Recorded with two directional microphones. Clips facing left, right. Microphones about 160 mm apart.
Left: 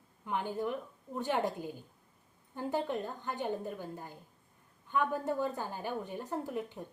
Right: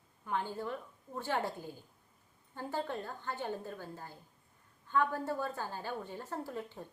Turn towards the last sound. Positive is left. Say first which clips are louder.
# left 4 dB
turn(degrees=15)  # may be behind; listen again after turning